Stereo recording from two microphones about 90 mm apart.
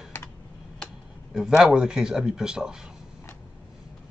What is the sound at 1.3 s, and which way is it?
A man's voice, 5° right (ahead or behind).